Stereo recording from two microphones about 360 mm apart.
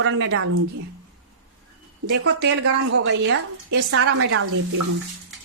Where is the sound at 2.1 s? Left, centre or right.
Right.